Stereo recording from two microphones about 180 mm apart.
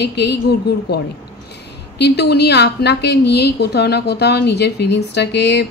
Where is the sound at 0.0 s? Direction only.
65° left (ahead or behind).